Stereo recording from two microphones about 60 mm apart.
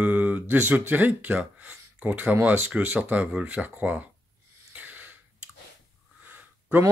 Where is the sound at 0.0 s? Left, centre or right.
Right.